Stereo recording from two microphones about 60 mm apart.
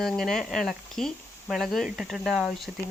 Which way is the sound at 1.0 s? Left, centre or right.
Centre.